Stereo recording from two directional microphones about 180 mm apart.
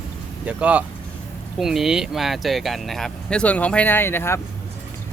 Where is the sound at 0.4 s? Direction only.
5° right (ahead or behind); by 4.4 s 15° left (ahead or behind).